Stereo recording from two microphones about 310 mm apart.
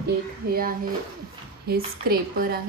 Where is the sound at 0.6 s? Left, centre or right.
Right.